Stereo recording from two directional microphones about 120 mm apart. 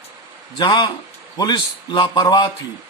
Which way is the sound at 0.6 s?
40° left (ahead or behind).